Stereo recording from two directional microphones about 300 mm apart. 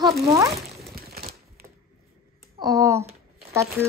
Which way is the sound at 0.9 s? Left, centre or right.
Right.